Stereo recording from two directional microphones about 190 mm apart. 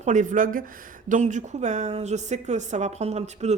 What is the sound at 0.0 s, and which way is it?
Speech, 40° right (ahead or behind).